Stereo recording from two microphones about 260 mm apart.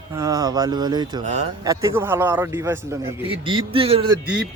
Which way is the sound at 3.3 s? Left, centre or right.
Centre.